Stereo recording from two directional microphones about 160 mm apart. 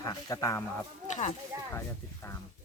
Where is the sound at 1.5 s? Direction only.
20° right (ahead or behind).